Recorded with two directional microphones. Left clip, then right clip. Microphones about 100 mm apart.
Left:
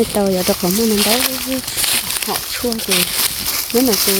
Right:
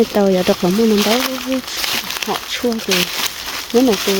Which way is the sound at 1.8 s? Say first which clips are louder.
Left 2 dB; centre (ahead or behind).